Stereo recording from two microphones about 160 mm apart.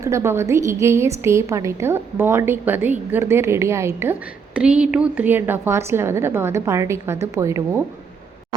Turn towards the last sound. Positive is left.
turn(degrees=-20)  # may be behind; listen again after turning